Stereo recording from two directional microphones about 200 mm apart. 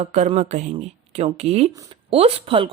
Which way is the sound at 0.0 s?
35° right (ahead or behind).